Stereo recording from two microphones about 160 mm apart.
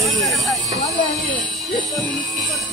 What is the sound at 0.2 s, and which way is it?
Vehicle, centre (ahead or behind).